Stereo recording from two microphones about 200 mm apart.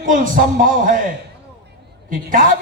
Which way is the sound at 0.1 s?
40° right (ahead or behind).